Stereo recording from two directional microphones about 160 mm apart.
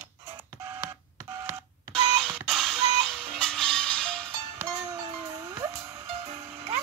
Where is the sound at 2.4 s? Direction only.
Centre (ahead or behind).